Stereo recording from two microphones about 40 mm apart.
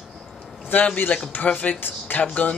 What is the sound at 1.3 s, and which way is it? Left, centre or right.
Speech, left.